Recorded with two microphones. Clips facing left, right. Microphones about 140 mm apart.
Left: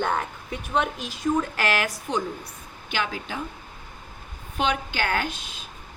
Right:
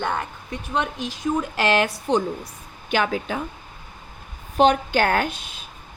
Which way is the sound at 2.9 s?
50° right (ahead or behind).